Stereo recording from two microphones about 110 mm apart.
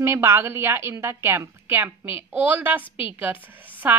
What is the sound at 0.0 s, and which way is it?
A woman's voice, 25° right (ahead or behind).